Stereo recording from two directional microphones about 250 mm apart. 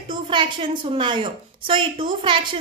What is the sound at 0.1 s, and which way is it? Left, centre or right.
A woman's voice, centre.